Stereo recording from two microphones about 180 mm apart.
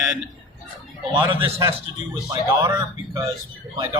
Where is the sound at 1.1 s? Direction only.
25° right (ahead or behind).